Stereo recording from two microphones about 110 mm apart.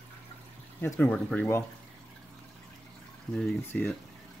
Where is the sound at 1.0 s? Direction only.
10° left (ahead or behind).